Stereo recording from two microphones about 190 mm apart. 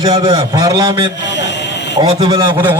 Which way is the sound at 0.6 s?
20° right (ahead or behind).